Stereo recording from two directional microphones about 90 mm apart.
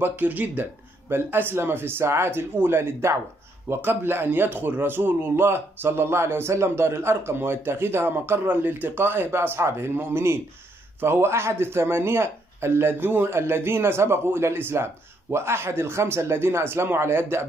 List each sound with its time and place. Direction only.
0.0 s a man's voice: 20° right (ahead or behind)